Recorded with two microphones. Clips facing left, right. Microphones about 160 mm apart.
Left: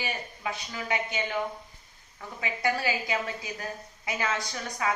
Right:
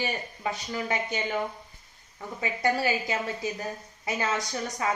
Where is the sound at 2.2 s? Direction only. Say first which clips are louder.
Right 3 dB; 35° right (ahead or behind).